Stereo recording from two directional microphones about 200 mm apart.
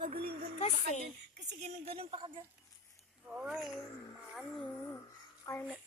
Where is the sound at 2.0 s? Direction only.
25° right (ahead or behind).